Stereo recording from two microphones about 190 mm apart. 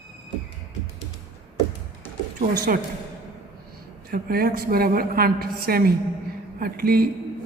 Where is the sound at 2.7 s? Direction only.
50° right (ahead or behind).